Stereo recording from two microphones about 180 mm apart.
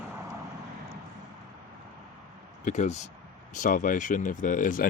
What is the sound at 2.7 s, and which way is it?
Speech, 40° left (ahead or behind).